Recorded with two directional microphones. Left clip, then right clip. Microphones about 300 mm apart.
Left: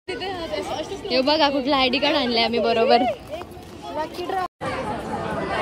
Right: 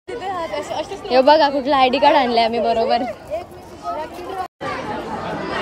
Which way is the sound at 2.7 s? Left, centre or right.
Centre.